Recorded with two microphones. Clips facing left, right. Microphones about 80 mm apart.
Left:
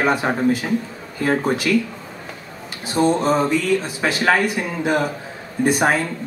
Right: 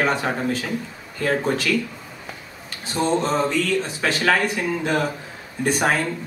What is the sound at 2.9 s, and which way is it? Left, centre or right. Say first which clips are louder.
Speech: left 4 dB; centre.